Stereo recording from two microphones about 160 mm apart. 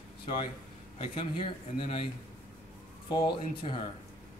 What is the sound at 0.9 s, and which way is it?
A man's voice, 35° left (ahead or behind).